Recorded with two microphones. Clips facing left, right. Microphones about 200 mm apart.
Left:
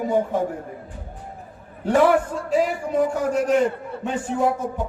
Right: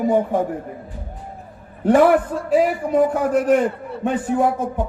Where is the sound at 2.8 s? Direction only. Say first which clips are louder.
Right 4 dB; 50° right (ahead or behind).